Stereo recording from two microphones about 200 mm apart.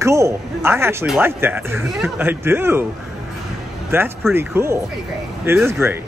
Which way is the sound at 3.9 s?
10° right (ahead or behind).